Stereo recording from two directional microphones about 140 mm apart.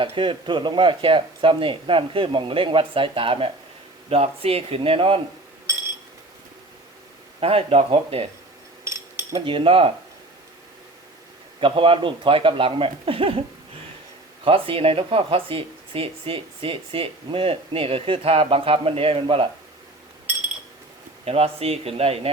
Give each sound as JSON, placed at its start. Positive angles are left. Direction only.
{"t": 0.0, "sound": "speech", "side_deg": -35}
{"t": 7.3, "sound": "speech", "side_deg": -45}
{"t": 8.8, "sound": "a sound", "side_deg": -20}
{"t": 9.5, "sound": "speech", "side_deg": -40}
{"t": 11.6, "sound": "speech", "side_deg": -40}
{"t": 14.4, "sound": "speech", "side_deg": -40}
{"t": 21.2, "sound": "speech", "side_deg": -45}